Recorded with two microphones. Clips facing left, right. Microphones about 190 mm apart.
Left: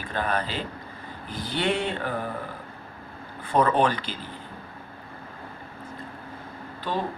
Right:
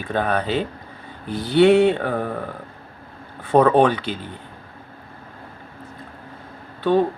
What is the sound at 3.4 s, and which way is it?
Speech, 65° right (ahead or behind).